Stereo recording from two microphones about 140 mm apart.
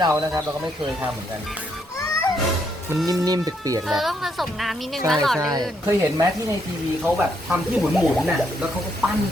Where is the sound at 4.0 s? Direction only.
Centre (ahead or behind).